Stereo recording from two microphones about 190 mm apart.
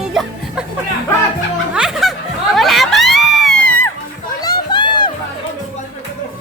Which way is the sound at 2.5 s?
Centre (ahead or behind).